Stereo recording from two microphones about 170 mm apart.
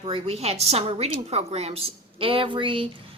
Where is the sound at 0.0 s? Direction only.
35° right (ahead or behind).